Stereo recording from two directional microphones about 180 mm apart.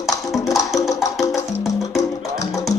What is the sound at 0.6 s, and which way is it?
Music, 20° left (ahead or behind).